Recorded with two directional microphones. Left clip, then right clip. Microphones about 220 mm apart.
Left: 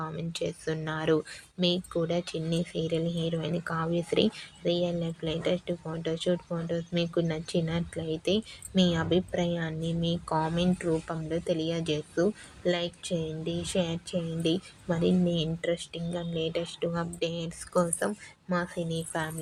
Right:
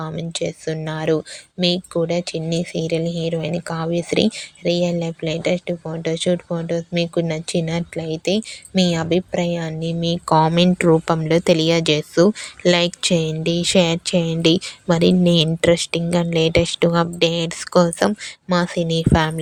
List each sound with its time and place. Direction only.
0.0 s speech: 30° right (ahead or behind); by 19.4 s 45° right (ahead or behind)